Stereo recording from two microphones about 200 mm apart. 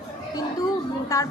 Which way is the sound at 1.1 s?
15° left (ahead or behind).